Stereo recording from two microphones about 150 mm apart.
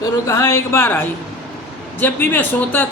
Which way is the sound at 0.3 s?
20° left (ahead or behind).